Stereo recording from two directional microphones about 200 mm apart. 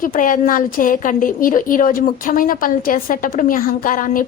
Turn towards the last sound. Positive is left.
turn(degrees=45)  # may be behind; listen again after turning